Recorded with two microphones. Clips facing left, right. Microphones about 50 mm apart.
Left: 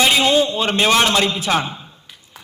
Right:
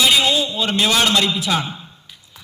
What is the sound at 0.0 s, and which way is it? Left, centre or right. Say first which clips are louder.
A man's voice: left 2 dB; left.